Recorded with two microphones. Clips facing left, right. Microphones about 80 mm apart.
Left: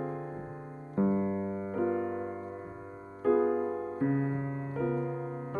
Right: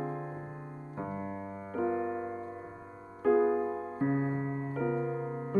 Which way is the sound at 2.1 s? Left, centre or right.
Centre.